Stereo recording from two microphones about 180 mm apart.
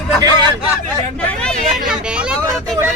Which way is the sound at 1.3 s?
5° left (ahead or behind).